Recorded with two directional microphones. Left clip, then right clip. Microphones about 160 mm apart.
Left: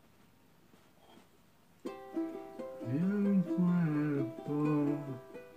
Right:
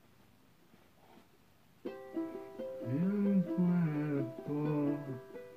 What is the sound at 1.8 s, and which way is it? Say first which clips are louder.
Music: left 2 dB; 20° left (ahead or behind).